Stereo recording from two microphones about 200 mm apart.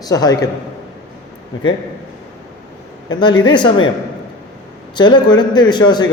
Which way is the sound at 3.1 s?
20° left (ahead or behind).